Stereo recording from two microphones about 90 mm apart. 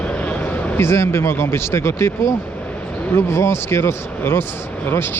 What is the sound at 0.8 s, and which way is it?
Speech, 30° left (ahead or behind).